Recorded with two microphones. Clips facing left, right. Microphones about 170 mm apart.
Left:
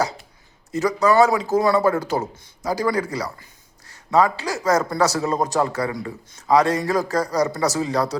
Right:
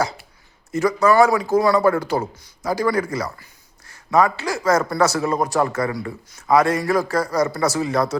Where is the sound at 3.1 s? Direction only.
15° left (ahead or behind).